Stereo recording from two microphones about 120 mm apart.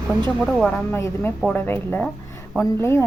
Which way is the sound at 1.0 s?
20° left (ahead or behind).